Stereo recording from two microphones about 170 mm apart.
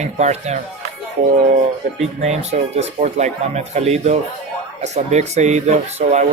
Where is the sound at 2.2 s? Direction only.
40° right (ahead or behind).